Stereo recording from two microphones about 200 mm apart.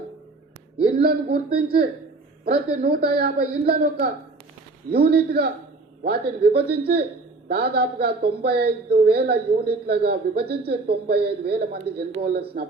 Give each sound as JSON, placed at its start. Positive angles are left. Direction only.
{"t": 0.8, "sound": "a woman's voice", "side_deg": -50}
{"t": 2.4, "sound": "a woman's voice", "side_deg": -50}